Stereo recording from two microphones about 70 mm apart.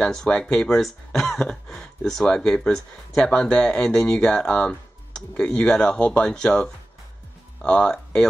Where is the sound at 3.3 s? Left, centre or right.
Centre.